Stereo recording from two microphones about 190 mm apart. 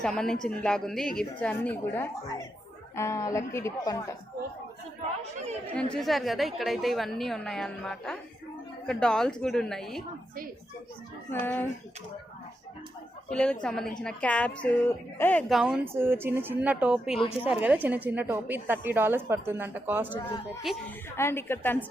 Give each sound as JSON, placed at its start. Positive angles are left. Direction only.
{"t": 0.0, "sound": "a woman's voice", "side_deg": 5}
{"t": 5.7, "sound": "a woman's voice", "side_deg": 0}
{"t": 11.3, "sound": "a woman's voice", "side_deg": 10}
{"t": 13.3, "sound": "a woman's voice", "side_deg": 5}
{"t": 21.2, "sound": "a woman's voice", "side_deg": 15}